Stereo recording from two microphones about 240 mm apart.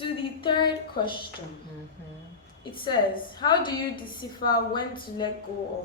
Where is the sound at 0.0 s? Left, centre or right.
Left.